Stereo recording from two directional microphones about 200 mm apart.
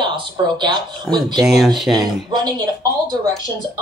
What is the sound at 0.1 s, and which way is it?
Speech, 25° right (ahead or behind).